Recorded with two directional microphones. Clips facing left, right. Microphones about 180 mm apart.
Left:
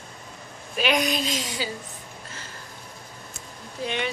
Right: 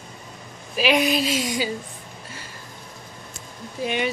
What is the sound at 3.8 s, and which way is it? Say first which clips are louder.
Speech: right 4 dB; 10° right (ahead or behind).